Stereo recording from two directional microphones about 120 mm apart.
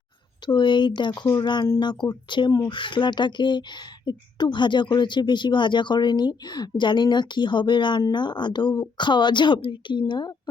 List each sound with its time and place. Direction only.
0.4 s speech: 40° left (ahead or behind)